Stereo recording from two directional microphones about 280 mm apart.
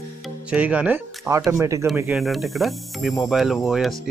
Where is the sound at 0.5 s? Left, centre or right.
Centre.